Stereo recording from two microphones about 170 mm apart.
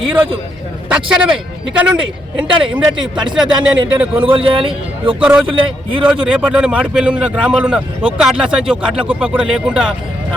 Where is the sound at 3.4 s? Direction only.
25° right (ahead or behind).